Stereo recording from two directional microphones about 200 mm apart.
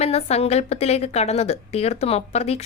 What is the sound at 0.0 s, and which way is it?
A woman's voice, 30° left (ahead or behind).